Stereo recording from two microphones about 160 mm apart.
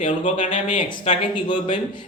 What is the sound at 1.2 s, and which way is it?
Speech, 30° left (ahead or behind).